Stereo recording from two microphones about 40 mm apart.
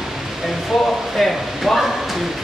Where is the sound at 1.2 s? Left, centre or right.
Centre.